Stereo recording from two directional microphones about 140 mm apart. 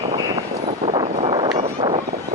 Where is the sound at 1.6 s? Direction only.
45° right (ahead or behind).